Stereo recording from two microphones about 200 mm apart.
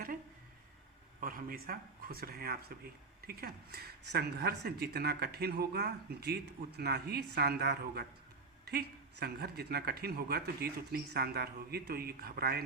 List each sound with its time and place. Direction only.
1.2 s speech: 45° right (ahead or behind)